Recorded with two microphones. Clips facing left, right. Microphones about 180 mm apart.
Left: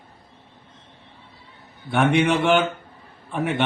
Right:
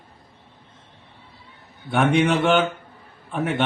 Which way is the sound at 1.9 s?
Centre (ahead or behind).